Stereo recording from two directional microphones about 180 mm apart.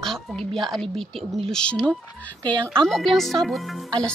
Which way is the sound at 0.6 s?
Centre (ahead or behind).